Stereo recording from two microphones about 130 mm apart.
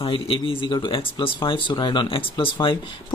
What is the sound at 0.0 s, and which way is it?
Speech, 45° left (ahead or behind).